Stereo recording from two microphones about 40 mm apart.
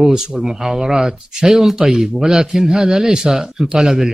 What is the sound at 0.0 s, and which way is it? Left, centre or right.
Speech, centre.